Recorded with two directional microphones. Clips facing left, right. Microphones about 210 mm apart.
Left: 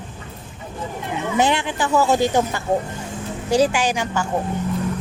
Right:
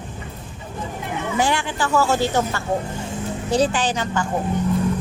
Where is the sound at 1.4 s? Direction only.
20° left (ahead or behind).